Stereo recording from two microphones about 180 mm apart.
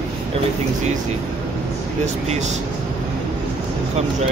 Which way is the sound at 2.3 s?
40° right (ahead or behind).